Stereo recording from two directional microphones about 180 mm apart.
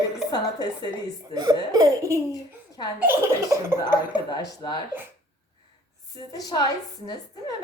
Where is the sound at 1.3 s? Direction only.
20° right (ahead or behind).